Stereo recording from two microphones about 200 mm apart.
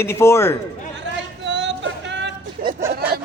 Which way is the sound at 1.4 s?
60° right (ahead or behind).